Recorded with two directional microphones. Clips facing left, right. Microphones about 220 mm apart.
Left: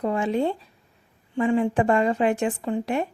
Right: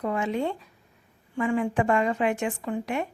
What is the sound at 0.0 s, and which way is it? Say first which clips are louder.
Speech: left 4 dB; 30° left (ahead or behind).